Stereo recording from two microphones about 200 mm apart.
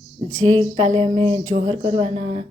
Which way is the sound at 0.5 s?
30° right (ahead or behind).